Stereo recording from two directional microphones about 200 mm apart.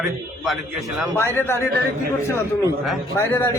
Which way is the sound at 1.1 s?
10° left (ahead or behind).